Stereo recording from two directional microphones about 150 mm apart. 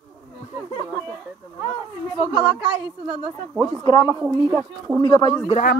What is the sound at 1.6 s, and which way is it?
Speech, 30° left (ahead or behind).